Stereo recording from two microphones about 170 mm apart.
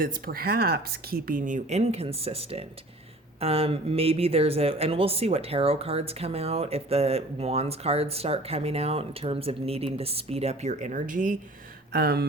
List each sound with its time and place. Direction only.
0.0 s speech: 55° right (ahead or behind)
11.9 s speech: 65° right (ahead or behind)